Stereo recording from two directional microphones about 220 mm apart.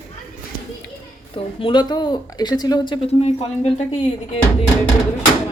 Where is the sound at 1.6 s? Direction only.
20° left (ahead or behind).